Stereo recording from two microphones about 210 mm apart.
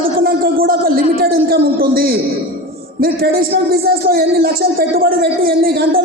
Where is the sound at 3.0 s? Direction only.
45° right (ahead or behind).